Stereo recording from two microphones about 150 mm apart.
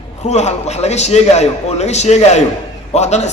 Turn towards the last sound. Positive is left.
turn(degrees=50)  # may be behind; listen again after turning